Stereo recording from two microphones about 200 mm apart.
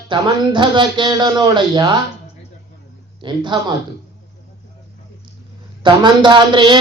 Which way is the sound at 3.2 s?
25° right (ahead or behind).